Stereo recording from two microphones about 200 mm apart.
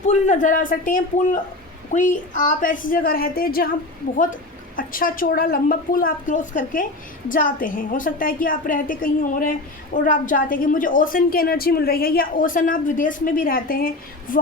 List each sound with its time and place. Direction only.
0.0 s a man's voice: 35° left (ahead or behind)
4.8 s a woman's voice: 45° left (ahead or behind)